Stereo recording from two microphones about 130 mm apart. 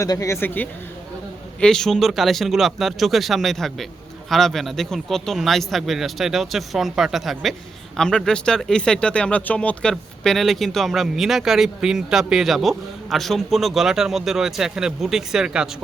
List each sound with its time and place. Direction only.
0.0 s speech: 25° left (ahead or behind)
1.6 s speech: 5° left (ahead or behind)